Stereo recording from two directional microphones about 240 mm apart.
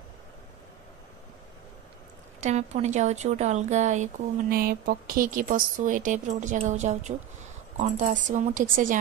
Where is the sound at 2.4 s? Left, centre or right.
Right.